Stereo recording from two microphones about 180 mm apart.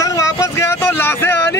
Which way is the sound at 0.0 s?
20° left (ahead or behind).